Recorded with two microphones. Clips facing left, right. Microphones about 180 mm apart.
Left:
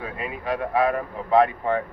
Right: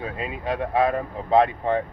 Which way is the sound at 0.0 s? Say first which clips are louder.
Right 1 dB; 25° right (ahead or behind).